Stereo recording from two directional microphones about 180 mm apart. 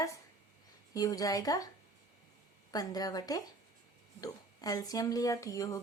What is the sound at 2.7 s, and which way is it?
A woman's voice, 20° left (ahead or behind).